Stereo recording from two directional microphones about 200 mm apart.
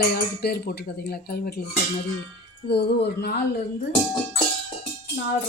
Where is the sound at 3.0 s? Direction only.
55° left (ahead or behind).